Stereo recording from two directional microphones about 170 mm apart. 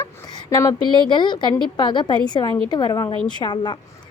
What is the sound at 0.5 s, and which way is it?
A woman's voice, 20° left (ahead or behind).